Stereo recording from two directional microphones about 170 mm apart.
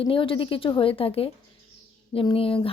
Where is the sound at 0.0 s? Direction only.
30° left (ahead or behind).